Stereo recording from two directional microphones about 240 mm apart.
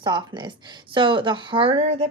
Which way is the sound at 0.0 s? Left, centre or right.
Centre.